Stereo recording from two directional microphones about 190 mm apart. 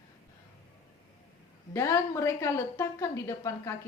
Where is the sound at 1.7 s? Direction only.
15° left (ahead or behind).